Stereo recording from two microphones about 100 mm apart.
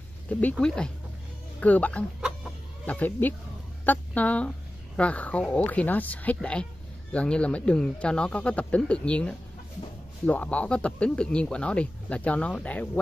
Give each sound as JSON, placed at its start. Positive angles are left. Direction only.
{"t": 0.3, "sound": "a woman's voice", "side_deg": 15}
{"t": 2.2, "sound": "chicken", "side_deg": 0}
{"t": 2.9, "sound": "a woman's voice", "side_deg": 15}